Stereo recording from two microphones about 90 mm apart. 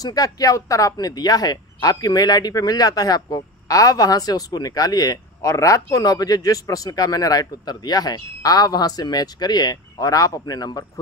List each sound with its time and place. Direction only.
0.0 s speech: 45° left (ahead or behind)